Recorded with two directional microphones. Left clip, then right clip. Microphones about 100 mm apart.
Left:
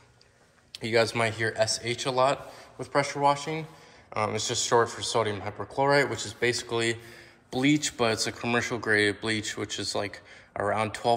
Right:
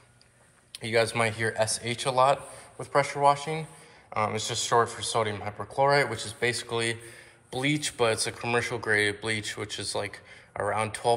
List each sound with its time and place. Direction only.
0.7 s speech: 45° left (ahead or behind)
1.1 s a man's voice: 25° left (ahead or behind); by 11.1 s 40° left (ahead or behind)